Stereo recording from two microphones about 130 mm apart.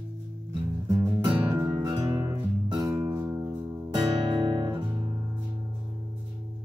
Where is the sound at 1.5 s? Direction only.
25° right (ahead or behind).